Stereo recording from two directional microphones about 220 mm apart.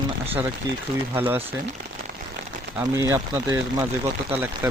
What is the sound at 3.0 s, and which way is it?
Speech, 15° right (ahead or behind).